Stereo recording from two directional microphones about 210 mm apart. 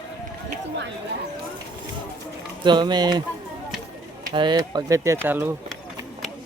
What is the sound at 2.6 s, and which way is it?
Speech, 20° right (ahead or behind).